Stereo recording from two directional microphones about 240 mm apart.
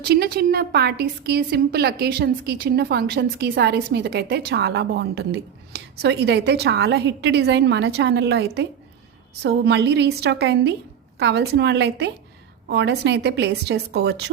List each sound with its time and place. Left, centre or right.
0.0 s a woman's voice: right